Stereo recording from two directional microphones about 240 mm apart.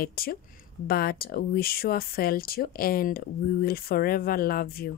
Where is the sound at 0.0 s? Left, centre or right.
Left.